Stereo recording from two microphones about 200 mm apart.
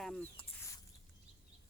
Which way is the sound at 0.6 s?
15° left (ahead or behind).